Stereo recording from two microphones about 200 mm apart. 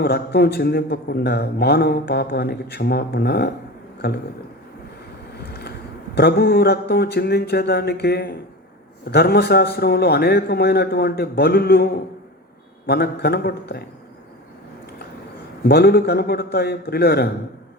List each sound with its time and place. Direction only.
0.0 s a man's voice: 55° left (ahead or behind)
6.1 s a man's voice: 55° left (ahead or behind)
15.6 s a man's voice: 50° left (ahead or behind)